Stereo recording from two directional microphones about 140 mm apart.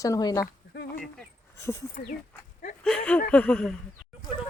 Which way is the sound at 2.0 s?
70° left (ahead or behind).